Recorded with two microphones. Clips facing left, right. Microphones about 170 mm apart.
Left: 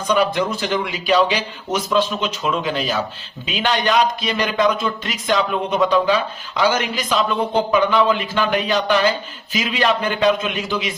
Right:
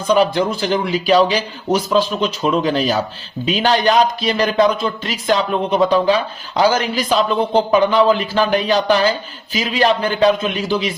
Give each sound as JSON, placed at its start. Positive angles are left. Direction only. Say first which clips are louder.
{"t": 0.1, "sound": "a man's voice", "louder": "right 4 dB", "side_deg": -30}